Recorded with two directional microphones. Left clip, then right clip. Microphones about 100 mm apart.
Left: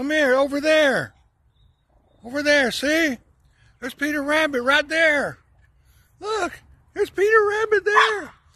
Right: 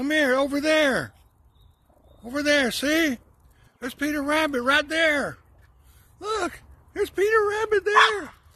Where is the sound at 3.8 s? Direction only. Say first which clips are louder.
Left 3 dB; 20° right (ahead or behind).